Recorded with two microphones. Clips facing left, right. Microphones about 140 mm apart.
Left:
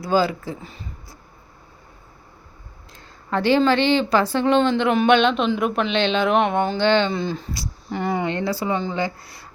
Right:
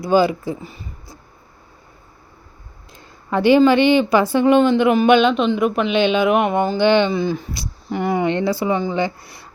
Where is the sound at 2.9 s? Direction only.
15° right (ahead or behind).